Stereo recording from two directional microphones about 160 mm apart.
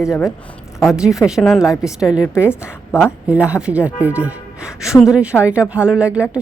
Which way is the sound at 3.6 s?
10° right (ahead or behind).